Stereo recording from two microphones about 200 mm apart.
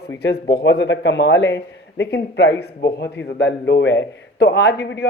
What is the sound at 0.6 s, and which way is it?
A man's voice, 60° left (ahead or behind).